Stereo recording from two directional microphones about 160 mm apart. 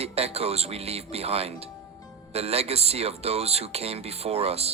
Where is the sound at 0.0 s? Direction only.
40° right (ahead or behind).